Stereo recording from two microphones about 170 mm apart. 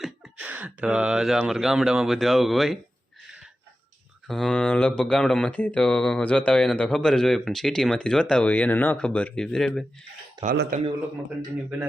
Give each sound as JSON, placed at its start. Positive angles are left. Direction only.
{"t": 0.0, "sound": "speech", "side_deg": -10}
{"t": 4.3, "sound": "speech", "side_deg": 0}
{"t": 10.4, "sound": "a man's voice", "side_deg": -55}